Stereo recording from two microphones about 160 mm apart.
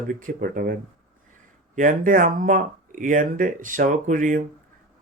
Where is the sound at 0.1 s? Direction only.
55° right (ahead or behind).